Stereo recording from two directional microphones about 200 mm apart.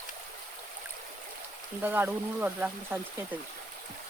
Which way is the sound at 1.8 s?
10° right (ahead or behind).